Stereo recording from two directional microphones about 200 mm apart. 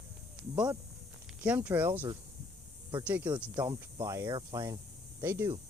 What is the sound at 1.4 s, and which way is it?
Speech, 5° right (ahead or behind).